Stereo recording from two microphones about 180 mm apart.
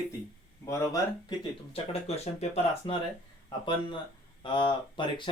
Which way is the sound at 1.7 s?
35° left (ahead or behind).